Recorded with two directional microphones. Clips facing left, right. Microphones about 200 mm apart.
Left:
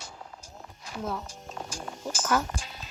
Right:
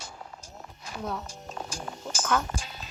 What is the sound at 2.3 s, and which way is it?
Speech, 5° left (ahead or behind).